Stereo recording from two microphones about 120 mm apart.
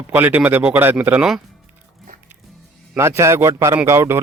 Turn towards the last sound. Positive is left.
turn(degrees=-20)  # may be behind; listen again after turning